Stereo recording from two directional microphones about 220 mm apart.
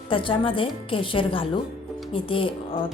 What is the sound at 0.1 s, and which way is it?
A woman's voice, 25° left (ahead or behind).